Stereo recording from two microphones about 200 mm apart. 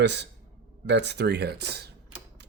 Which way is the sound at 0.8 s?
60° right (ahead or behind).